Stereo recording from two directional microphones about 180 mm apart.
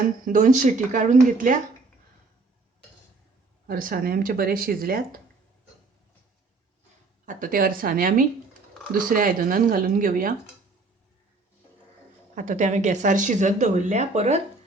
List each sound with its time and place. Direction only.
0.0 s speech: 45° right (ahead or behind)
3.7 s speech: 50° right (ahead or behind)
7.3 s speech: 50° right (ahead or behind)
12.3 s speech: 45° right (ahead or behind)